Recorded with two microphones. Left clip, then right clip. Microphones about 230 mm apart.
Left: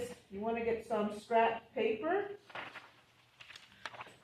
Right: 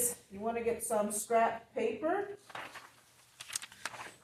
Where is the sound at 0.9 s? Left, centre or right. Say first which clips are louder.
Right 3 dB; right.